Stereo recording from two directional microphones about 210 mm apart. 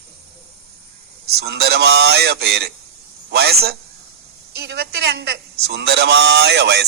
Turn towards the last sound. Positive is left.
turn(degrees=-55)  # may be behind; listen again after turning